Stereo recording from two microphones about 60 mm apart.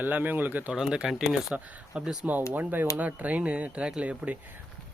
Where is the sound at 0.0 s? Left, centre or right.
Right.